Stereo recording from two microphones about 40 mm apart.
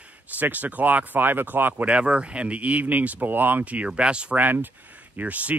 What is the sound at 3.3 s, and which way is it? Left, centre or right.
Speech, right.